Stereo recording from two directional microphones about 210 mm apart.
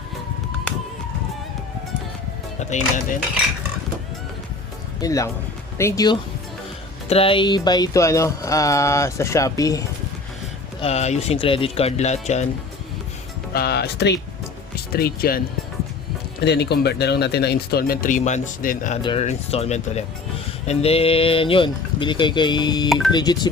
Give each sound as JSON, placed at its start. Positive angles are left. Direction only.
{"t": 2.6, "sound": "speech", "side_deg": 35}
{"t": 4.9, "sound": "speech", "side_deg": 15}
{"t": 7.1, "sound": "music", "side_deg": 25}
{"t": 10.8, "sound": "speech", "side_deg": 30}
{"t": 13.5, "sound": "speech", "side_deg": 50}
{"t": 16.4, "sound": "speech", "side_deg": 50}